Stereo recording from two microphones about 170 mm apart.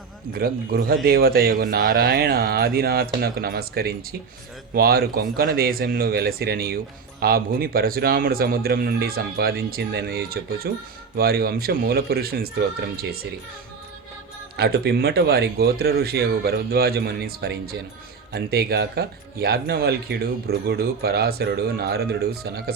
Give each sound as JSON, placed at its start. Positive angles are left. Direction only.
{"t": 0.3, "sound": "a man's voice", "side_deg": -60}
{"t": 14.5, "sound": "speech", "side_deg": -70}